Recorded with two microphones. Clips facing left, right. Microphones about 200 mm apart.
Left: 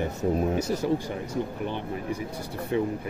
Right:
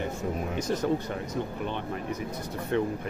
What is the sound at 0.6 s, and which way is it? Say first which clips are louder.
Speech: left 1 dB; 10° left (ahead or behind).